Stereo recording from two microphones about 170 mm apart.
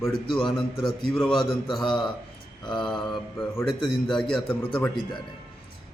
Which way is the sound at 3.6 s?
Centre (ahead or behind).